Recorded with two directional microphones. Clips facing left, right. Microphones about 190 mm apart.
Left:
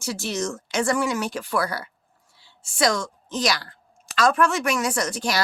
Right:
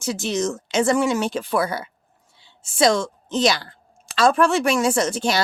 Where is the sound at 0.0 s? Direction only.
20° right (ahead or behind).